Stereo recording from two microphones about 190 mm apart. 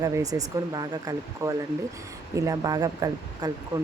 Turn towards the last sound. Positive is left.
turn(degrees=-20)  # may be behind; listen again after turning